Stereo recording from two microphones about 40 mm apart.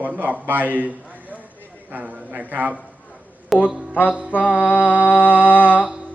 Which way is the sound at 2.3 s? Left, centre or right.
Right.